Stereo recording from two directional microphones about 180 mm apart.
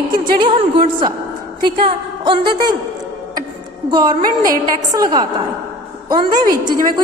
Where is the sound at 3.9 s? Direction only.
25° right (ahead or behind).